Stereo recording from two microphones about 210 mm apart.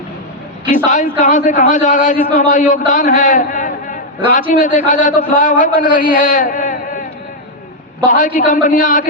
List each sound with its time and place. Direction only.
0.9 s a man's voice: 35° left (ahead or behind)
6.1 s a sound: 35° left (ahead or behind)
8.0 s a man's voice: 40° left (ahead or behind)